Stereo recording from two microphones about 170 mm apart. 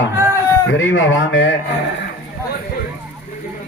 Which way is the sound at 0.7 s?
90° left.